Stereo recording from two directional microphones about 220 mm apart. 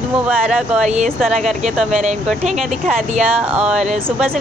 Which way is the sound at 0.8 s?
30° right (ahead or behind).